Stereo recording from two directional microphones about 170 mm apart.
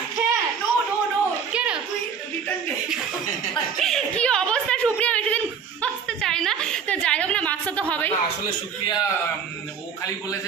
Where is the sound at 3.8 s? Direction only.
5° left (ahead or behind).